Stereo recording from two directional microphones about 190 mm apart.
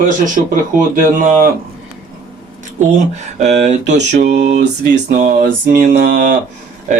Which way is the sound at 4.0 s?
55° right (ahead or behind).